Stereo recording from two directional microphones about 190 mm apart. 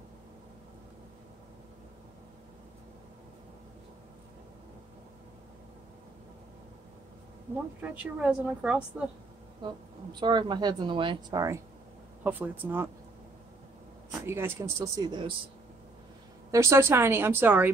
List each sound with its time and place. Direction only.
7.8 s a woman's voice: 5° right (ahead or behind)
9.6 s a woman's voice: 25° right (ahead or behind)
14.2 s a woman's voice: 10° right (ahead or behind)
16.5 s a woman's voice: 15° right (ahead or behind)